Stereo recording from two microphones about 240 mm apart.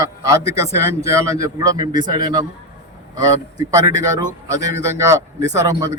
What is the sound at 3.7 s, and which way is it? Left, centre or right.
A man's voice, centre.